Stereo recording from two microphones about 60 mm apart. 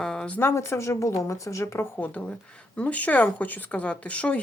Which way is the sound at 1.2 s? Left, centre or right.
Left.